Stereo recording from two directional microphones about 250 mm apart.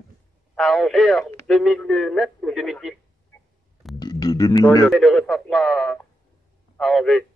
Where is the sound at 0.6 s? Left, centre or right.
Centre.